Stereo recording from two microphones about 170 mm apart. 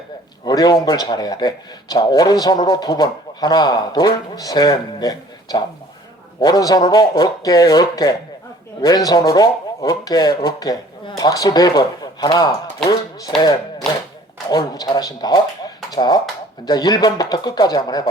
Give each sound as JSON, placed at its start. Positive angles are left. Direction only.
{"t": 0.4, "sound": "a man's voice", "side_deg": 25}
{"t": 14.5, "sound": "a man's voice", "side_deg": 25}